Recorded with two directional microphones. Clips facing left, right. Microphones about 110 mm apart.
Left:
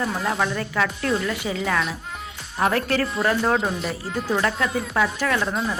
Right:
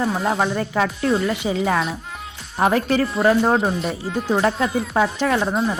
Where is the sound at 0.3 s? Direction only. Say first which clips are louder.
Right 3 dB; 30° right (ahead or behind).